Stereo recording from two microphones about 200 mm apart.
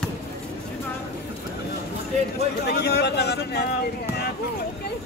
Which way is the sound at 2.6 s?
55° left (ahead or behind).